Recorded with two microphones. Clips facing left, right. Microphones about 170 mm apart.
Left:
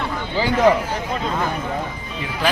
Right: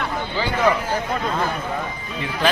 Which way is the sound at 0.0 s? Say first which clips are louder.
Left 2 dB; 25° left (ahead or behind).